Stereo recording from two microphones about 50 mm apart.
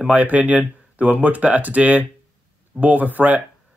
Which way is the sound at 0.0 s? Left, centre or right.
Right.